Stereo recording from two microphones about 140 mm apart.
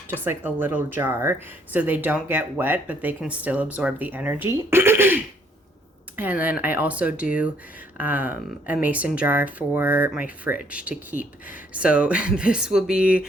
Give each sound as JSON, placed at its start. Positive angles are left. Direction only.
{"t": 0.1, "sound": "speech", "side_deg": -15}
{"t": 4.4, "sound": "a sound", "side_deg": -15}
{"t": 6.4, "sound": "speech", "side_deg": -10}